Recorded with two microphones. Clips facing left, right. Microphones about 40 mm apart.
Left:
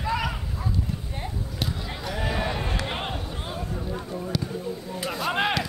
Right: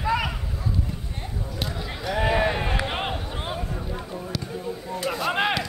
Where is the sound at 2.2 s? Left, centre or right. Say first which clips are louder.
Right 6 dB; right.